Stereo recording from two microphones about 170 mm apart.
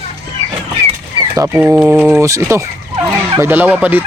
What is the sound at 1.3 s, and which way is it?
Speech, 20° right (ahead or behind).